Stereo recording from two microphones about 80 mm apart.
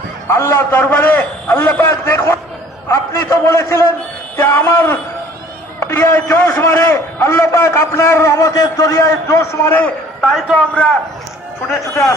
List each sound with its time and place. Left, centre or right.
0.3 s a man's voice: left
1.8 s a sound: left
2.9 s a man's voice: left
5.8 s a sound: left
6.2 s a man's voice: left
9.6 s a man's voice: left
10.5 s a man's voice: centre